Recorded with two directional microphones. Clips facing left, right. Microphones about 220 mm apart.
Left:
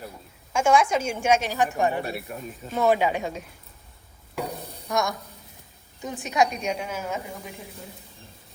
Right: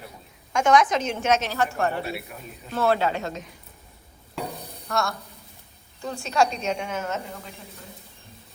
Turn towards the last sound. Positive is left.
turn(degrees=10)  # may be behind; listen again after turning